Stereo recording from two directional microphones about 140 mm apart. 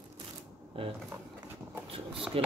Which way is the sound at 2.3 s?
40° right (ahead or behind).